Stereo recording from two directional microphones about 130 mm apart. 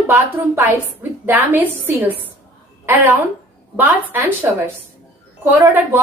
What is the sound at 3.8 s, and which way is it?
A woman's voice, 15° right (ahead or behind).